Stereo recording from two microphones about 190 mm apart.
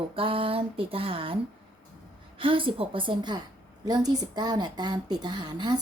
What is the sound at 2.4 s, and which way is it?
A woman's voice, 25° right (ahead or behind).